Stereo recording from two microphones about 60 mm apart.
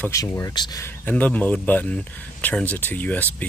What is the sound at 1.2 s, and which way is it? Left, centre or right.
Speech, left.